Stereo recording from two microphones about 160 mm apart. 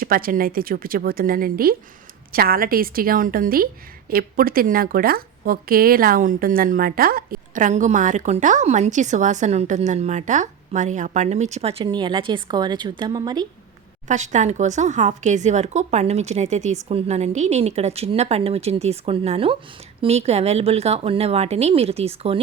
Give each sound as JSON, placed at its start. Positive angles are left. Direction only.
{"t": 0.0, "sound": "a woman's voice", "side_deg": -65}
{"t": 14.1, "sound": "a woman's voice", "side_deg": -50}